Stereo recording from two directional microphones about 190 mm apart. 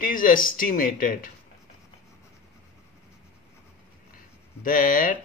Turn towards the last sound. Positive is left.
turn(degrees=45)  # may be behind; listen again after turning